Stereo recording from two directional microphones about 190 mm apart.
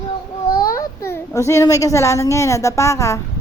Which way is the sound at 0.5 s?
50° left (ahead or behind).